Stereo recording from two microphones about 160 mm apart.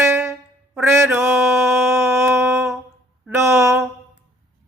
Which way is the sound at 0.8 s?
15° right (ahead or behind).